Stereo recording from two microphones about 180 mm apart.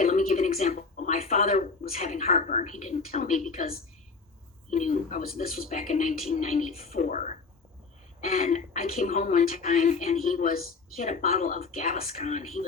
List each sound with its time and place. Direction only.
0.0 s a woman's voice: 50° left (ahead or behind)